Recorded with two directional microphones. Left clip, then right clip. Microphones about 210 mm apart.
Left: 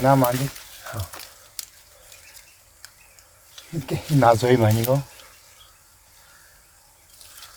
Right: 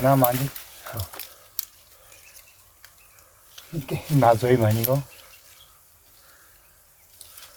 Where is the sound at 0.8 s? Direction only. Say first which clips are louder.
Left 2 dB; 5° left (ahead or behind).